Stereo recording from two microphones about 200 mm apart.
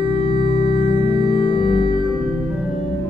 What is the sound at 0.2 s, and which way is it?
Music, 25° left (ahead or behind).